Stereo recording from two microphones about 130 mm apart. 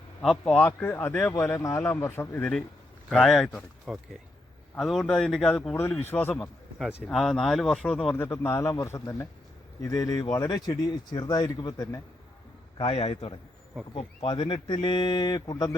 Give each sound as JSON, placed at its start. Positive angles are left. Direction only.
{"t": 0.2, "sound": "speech", "side_deg": 5}
{"t": 0.5, "sound": "speech", "side_deg": 15}
{"t": 1.5, "sound": "speech", "side_deg": 25}
{"t": 3.1, "sound": "speech", "side_deg": 0}
{"t": 5.7, "sound": "speech", "side_deg": 15}
{"t": 7.1, "sound": "speech", "side_deg": 0}
{"t": 8.2, "sound": "speech", "side_deg": 20}
{"t": 12.7, "sound": "a man's voice", "side_deg": 50}